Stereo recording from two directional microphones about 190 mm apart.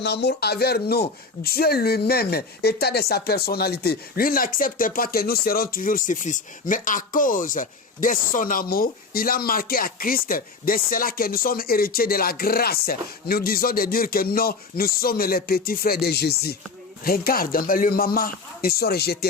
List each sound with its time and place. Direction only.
0.0 s speech: 60° left (ahead or behind)